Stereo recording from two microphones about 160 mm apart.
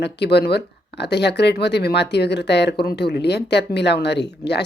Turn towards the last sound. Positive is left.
turn(degrees=90)